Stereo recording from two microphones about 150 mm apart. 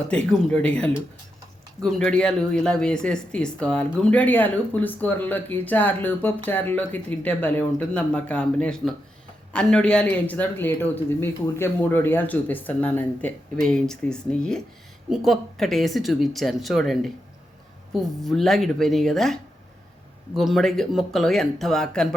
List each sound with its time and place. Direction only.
0.1 s speech: 5° left (ahead or behind)